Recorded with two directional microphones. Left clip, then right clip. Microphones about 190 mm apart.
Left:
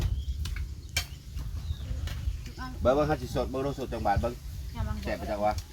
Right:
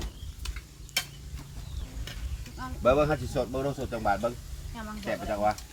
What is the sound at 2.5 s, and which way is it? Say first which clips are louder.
Speech: right 2 dB; 10° right (ahead or behind).